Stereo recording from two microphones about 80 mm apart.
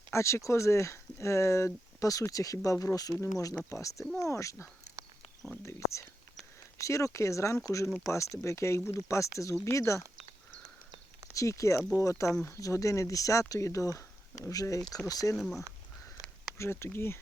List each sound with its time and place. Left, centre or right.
0.1 s speech: left
11.3 s speech: left
15.4 s speech: centre
16.6 s speech: left